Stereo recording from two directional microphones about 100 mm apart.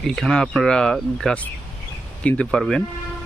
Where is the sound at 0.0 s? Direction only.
5° left (ahead or behind).